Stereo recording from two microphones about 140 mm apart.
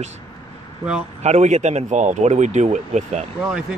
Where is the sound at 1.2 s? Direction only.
55° right (ahead or behind).